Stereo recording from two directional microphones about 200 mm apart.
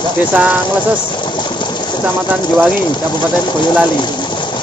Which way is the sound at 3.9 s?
20° left (ahead or behind).